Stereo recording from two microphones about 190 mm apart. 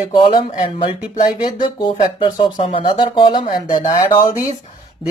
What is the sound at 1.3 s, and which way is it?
Speech, 20° left (ahead or behind).